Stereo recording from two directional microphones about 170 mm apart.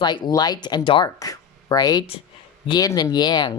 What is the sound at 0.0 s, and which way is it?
Speech, 25° left (ahead or behind).